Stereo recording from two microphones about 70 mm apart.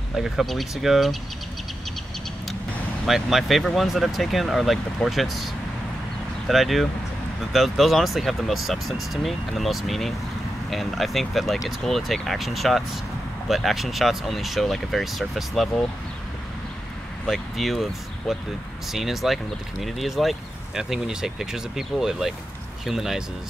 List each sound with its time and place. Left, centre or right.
0.1 s speech: centre
3.1 s speech: centre
17.3 s speech: centre
18.9 s speech: centre